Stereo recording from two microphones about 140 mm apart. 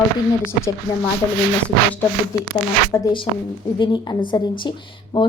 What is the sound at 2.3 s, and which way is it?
Speech, 25° left (ahead or behind).